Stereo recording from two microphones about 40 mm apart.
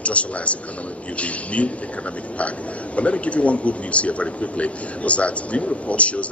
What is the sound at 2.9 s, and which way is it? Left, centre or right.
A man's voice, left.